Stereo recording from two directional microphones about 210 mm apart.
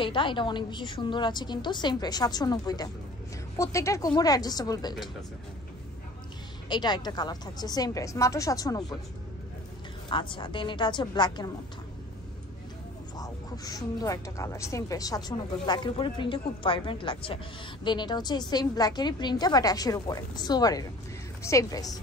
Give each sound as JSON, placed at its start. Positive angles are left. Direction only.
{"t": 0.0, "sound": "a woman's voice", "side_deg": 25}
{"t": 6.7, "sound": "a woman's voice", "side_deg": 20}
{"t": 10.0, "sound": "speech", "side_deg": 25}
{"t": 13.2, "sound": "a woman's voice", "side_deg": 15}